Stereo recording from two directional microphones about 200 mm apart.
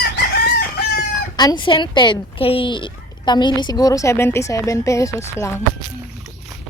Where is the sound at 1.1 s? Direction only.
20° left (ahead or behind).